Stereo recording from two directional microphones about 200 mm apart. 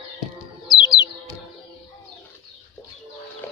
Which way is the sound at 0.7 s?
20° left (ahead or behind).